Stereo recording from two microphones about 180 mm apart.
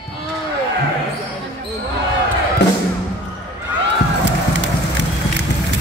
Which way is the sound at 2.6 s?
75° left (ahead or behind).